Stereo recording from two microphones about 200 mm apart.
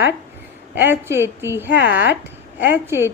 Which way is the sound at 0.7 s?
10° right (ahead or behind).